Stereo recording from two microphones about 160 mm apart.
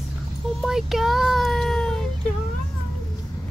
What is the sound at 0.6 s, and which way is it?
Speech, centre (ahead or behind).